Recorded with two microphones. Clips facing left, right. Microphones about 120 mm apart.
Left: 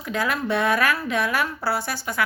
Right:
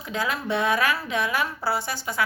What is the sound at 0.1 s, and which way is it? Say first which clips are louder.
A woman's voice: left 3 dB; 20° right (ahead or behind).